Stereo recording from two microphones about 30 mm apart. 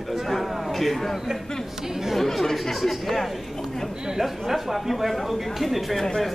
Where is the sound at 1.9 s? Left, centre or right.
Centre.